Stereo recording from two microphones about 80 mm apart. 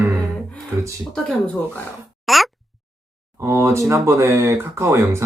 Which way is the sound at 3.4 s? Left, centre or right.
Right.